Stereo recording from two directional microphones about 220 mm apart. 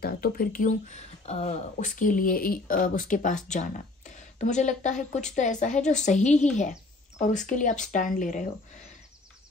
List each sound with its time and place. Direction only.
0.0 s speech: 40° left (ahead or behind)